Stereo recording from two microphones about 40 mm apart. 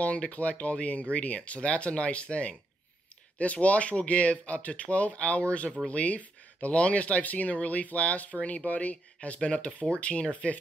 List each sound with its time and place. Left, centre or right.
0.0 s speech: left